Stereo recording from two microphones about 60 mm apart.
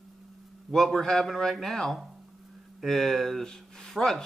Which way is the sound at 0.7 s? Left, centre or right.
Centre.